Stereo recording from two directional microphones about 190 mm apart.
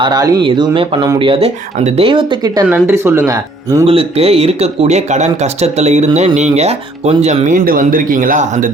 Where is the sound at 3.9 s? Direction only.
30° right (ahead or behind).